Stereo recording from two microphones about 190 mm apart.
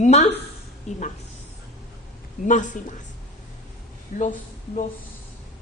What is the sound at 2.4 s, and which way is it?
Speech, 40° left (ahead or behind).